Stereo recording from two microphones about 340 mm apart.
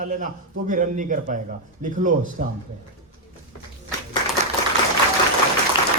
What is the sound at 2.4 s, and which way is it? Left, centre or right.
Speech, right.